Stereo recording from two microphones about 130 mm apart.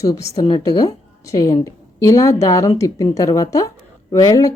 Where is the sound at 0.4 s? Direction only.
35° left (ahead or behind).